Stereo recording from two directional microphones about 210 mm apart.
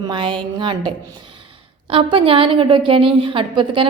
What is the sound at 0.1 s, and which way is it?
A woman's voice, 25° right (ahead or behind).